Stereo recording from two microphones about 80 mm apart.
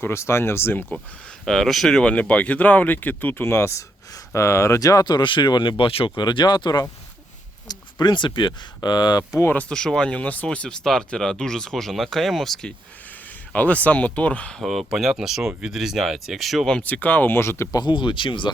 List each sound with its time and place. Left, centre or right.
0.0 s speech: left
1.5 s speech: centre; by 5.9 s left
6.1 s speech: left
9.5 s speech: centre
13.5 s speech: centre
14.6 s speech: centre
16.7 s speech: centre
17.7 s speech: left
17.9 s speech: left